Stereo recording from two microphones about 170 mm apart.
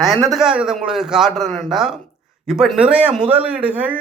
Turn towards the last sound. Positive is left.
turn(degrees=-10)  # may be behind; listen again after turning